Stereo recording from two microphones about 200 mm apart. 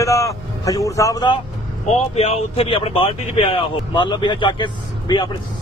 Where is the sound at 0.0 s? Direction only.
15° left (ahead or behind).